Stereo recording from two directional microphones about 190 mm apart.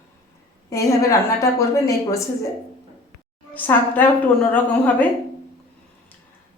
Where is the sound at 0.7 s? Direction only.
15° left (ahead or behind).